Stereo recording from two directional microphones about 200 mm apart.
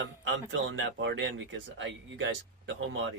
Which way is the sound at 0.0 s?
70° right (ahead or behind).